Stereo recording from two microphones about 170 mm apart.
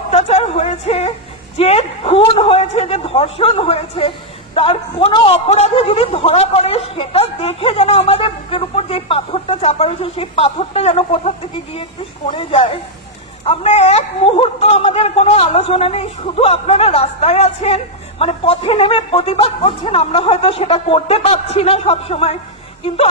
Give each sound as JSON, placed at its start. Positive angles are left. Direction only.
{"t": 0.1, "sound": "a woman's voice", "side_deg": 40}